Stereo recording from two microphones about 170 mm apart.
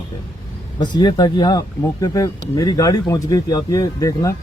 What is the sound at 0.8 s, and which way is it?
Speech, 25° left (ahead or behind).